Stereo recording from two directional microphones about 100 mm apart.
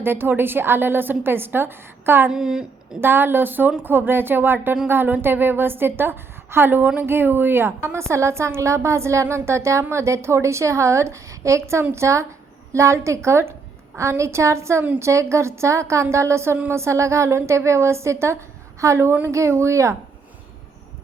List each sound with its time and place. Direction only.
0.0 s a woman's voice: 20° right (ahead or behind)
2.3 s a woman's voice: 5° right (ahead or behind)
3.0 s a woman's voice: 20° right (ahead or behind)